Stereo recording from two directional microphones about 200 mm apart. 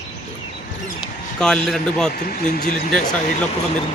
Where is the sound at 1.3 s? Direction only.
5° left (ahead or behind).